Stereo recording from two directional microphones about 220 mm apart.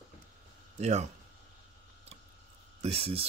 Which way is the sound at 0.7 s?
30° right (ahead or behind).